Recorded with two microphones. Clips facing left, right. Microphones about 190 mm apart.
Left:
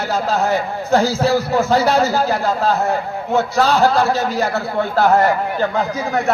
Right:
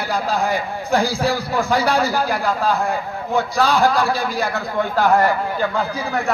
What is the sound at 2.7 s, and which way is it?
Speech, 40° left (ahead or behind).